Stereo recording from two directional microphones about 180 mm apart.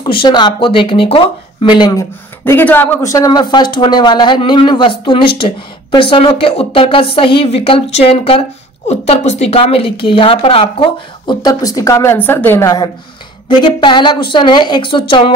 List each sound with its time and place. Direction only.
0.0 s a woman's voice: 25° left (ahead or behind)